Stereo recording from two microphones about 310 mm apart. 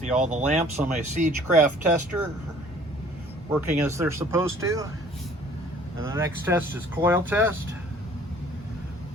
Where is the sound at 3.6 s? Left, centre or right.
Centre.